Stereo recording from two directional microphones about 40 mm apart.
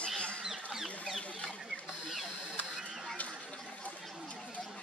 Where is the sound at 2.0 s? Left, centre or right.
Centre.